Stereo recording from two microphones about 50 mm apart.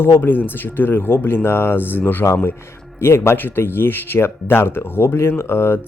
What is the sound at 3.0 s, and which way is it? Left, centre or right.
Speech, left.